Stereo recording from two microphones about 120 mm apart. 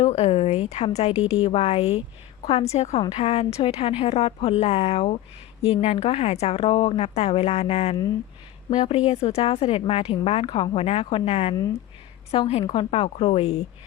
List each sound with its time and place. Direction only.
0.1 s speech: 60° left (ahead or behind)